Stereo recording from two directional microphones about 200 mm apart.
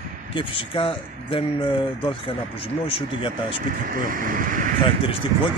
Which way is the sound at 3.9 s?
45° right (ahead or behind).